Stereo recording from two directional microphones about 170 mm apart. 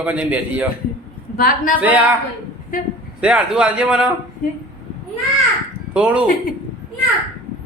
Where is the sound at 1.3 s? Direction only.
60° left (ahead or behind).